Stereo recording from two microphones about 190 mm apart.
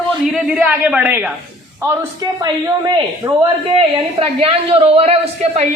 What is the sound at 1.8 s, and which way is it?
A man's voice, 20° right (ahead or behind).